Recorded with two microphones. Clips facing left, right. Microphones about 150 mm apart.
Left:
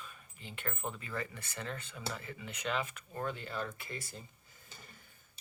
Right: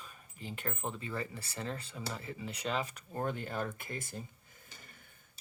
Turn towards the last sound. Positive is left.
turn(degrees=-50)  # may be behind; listen again after turning